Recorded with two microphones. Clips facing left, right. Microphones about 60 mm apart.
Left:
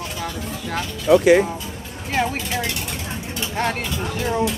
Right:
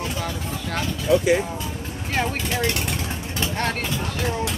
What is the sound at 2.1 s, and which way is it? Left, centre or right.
Speech, centre.